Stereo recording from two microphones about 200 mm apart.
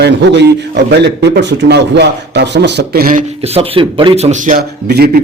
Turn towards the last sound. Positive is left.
turn(degrees=-50)  # may be behind; listen again after turning